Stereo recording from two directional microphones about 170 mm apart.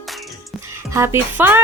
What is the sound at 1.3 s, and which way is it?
Speech, 10° right (ahead or behind).